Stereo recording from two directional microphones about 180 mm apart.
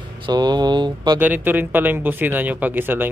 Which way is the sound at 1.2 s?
10° right (ahead or behind).